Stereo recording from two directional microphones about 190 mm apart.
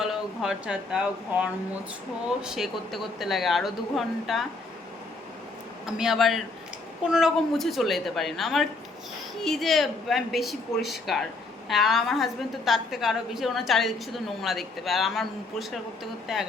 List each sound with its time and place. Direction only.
0.0 s a woman's voice: 5° right (ahead or behind)
5.8 s a woman's voice: centre (ahead or behind)